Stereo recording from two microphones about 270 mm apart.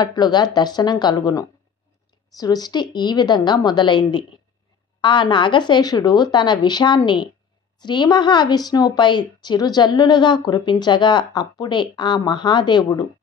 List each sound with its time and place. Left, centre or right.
0.0 s a woman's voice: centre